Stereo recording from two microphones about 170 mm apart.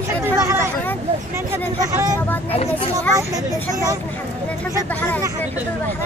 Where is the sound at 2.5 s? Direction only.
35° left (ahead or behind).